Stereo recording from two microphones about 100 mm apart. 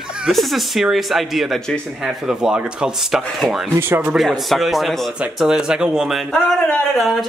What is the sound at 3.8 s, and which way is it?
Speech, 20° right (ahead or behind).